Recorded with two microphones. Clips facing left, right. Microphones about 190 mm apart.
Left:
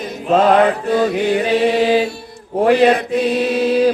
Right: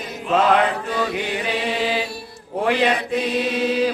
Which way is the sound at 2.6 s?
40° left (ahead or behind).